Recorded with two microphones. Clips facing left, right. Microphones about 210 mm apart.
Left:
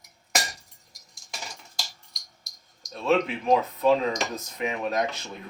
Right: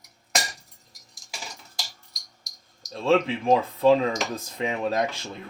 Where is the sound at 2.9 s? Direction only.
30° right (ahead or behind).